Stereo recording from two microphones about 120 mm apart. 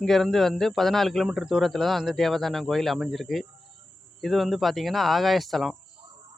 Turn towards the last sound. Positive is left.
turn(degrees=0)  # may be behind; listen again after turning